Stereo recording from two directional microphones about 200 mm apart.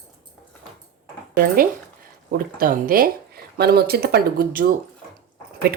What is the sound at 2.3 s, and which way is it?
Speech, 45° right (ahead or behind).